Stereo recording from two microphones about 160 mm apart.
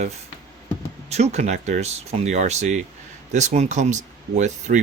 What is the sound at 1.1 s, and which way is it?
Speech, 45° right (ahead or behind).